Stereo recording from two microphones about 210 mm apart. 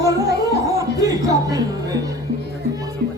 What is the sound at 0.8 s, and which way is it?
Music, 15° right (ahead or behind).